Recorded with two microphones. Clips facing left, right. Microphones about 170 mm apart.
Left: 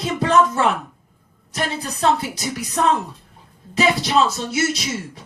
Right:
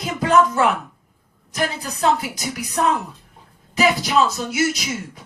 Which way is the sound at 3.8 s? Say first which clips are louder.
Even; 30° left (ahead or behind).